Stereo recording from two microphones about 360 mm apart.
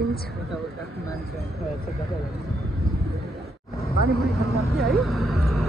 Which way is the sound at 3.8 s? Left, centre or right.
Left.